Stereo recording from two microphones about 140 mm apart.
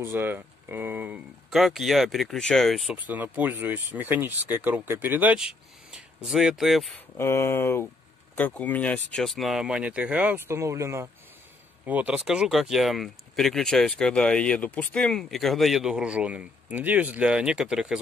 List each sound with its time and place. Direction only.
0.0 s speech: 15° right (ahead or behind); by 3.0 s centre (ahead or behind)
3.0 s speech: 10° right (ahead or behind)
7.2 s speech: 20° left (ahead or behind); by 17.9 s 5° right (ahead or behind)